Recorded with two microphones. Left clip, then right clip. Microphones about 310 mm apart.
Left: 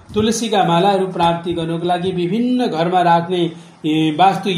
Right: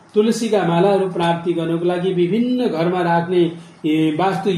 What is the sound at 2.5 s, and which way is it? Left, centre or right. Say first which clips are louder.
A man's voice: left 6 dB; left.